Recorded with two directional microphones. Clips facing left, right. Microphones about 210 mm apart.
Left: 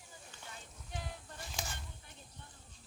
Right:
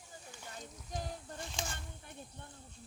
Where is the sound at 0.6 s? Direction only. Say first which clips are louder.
Right 5 dB; 40° right (ahead or behind).